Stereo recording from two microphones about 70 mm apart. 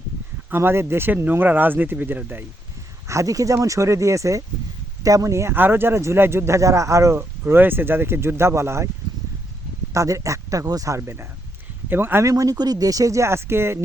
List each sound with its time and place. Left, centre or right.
0.5 s speech: right
3.1 s speech: right
5.5 s speech: right
7.2 s speech: right
9.9 s speech: right
12.2 s speech: right